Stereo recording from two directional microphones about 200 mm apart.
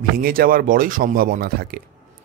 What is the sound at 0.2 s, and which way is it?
A man's voice, 45° right (ahead or behind).